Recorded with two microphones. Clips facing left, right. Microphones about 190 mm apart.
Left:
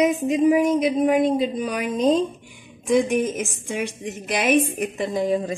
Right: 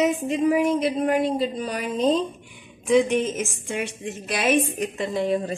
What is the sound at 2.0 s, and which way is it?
Speech, 40° left (ahead or behind).